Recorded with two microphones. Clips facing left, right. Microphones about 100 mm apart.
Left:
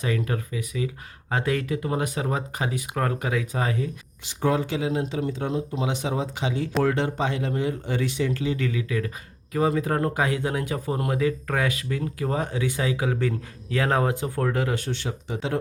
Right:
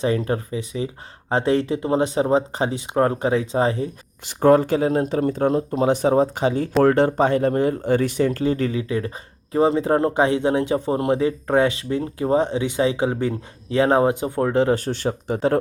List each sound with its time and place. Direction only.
0.0 s speech: 30° right (ahead or behind)
4.4 s speech: 50° right (ahead or behind)